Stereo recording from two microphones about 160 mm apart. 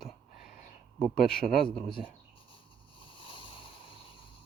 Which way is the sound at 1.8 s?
Centre (ahead or behind).